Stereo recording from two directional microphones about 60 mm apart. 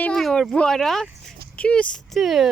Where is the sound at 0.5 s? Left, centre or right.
Centre.